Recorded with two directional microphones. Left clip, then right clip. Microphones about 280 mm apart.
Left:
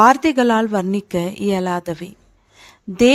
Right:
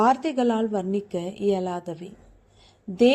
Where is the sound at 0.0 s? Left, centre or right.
Left.